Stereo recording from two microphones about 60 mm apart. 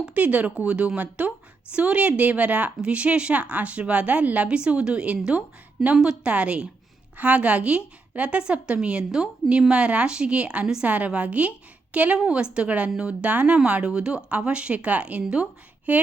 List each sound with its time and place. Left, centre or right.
0.0 s a woman's voice: right